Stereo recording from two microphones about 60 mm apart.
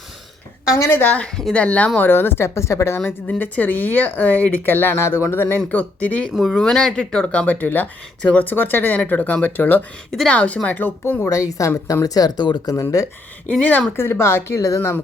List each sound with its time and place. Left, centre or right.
0.9 s speech: left
1.1 s speech: centre
2.0 s a woman's voice: left
3.2 s speech: left
6.3 s speech: centre; by 9.8 s left
10.2 s speech: left
11.0 s speech: left
11.3 s a woman's voice: left
12.0 s speech: left
13.5 s speech: left
13.9 s a woman's voice: left
14.8 s speech: left